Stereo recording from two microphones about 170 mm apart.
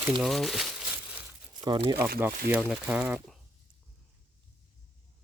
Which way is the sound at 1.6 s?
25° right (ahead or behind).